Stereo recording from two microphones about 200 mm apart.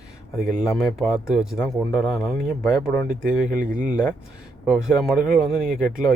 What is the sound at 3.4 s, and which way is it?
Speech, 40° right (ahead or behind).